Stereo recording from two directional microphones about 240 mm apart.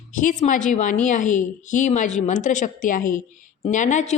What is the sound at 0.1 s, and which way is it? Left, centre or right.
A woman's voice, left.